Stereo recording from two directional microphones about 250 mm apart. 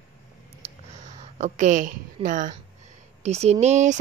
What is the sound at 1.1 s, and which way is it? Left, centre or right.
A woman's voice, right.